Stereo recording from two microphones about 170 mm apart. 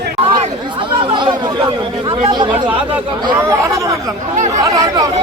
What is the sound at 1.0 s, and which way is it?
Chatter, 30° right (ahead or behind).